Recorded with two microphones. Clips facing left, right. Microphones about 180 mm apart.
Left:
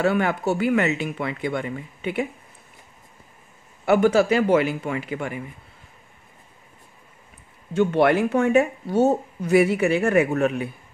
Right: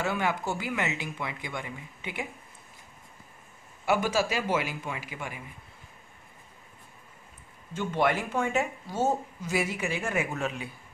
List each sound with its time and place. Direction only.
0.0 s speech: 60° left (ahead or behind)
3.8 s speech: 60° left (ahead or behind)
7.8 s speech: 60° left (ahead or behind)